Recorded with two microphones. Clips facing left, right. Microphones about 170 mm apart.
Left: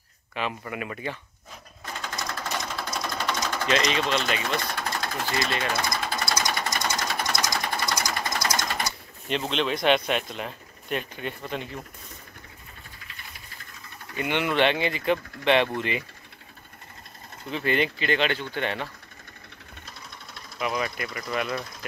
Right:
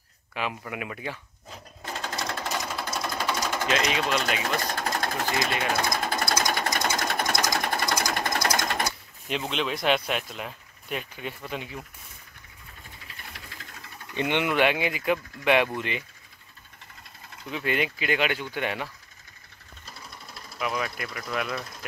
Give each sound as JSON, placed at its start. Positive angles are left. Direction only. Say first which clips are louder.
{"t": 0.3, "sound": "speech", "louder": "left 1 dB", "side_deg": -5}
{"t": 2.0, "sound": "sewing machine", "louder": "right 2 dB", "side_deg": -35}
{"t": 2.5, "sound": "sewing machine", "louder": "even", "side_deg": -5}
{"t": 4.6, "sound": "sewing machine", "louder": "right 1 dB", "side_deg": -40}
{"t": 9.4, "sound": "speech", "louder": "left 3 dB", "side_deg": -5}
{"t": 14.1, "sound": "speech", "louder": "even", "side_deg": -20}
{"t": 17.5, "sound": "speech", "louder": "left 2 dB", "side_deg": -5}
{"t": 19.9, "sound": "speech", "louder": "right 2 dB", "side_deg": 0}